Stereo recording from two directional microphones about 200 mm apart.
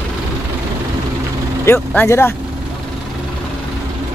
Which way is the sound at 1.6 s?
10° left (ahead or behind).